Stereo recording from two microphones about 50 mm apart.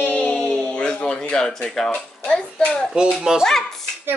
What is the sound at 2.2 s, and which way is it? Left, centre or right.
Hands, centre.